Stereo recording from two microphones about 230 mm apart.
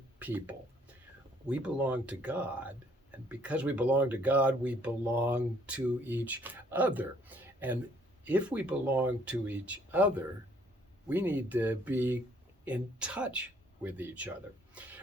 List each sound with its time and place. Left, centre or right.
0.2 s speech: centre